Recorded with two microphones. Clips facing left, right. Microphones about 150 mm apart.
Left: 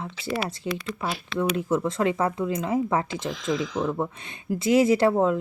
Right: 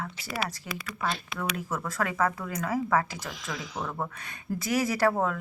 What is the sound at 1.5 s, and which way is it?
Speech, 25° left (ahead or behind).